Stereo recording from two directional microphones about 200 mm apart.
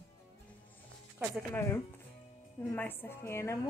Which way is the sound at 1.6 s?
10° left (ahead or behind).